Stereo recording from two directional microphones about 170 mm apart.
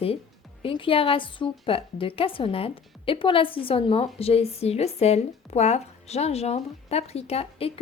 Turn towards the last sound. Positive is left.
turn(degrees=35)  # may be behind; listen again after turning